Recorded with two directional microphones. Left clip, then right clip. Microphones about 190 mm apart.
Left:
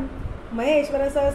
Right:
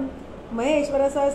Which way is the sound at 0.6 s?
25° right (ahead or behind).